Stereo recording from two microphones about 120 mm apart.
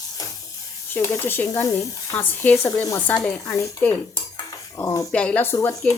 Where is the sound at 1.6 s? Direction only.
25° left (ahead or behind).